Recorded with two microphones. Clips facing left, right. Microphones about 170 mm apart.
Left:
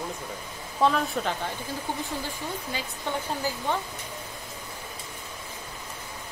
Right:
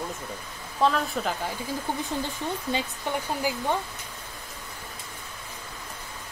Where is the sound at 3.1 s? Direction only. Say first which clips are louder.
Right 2 dB; 15° right (ahead or behind).